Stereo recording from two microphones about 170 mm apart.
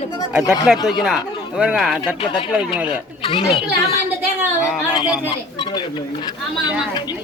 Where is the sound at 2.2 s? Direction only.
30° left (ahead or behind).